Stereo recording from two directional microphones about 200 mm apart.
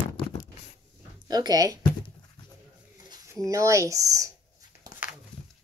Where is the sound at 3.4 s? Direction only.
15° right (ahead or behind).